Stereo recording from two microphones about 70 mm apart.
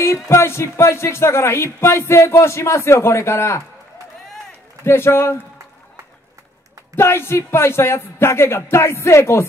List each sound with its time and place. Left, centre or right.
0.0 s speech: left
4.8 s speech: left
7.0 s speech: left